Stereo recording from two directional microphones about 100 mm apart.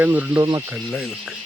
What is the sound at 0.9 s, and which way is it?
Speech, centre (ahead or behind).